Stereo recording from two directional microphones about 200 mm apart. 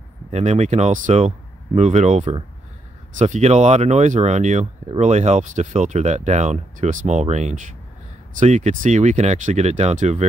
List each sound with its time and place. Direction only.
0.3 s speech: 35° right (ahead or behind)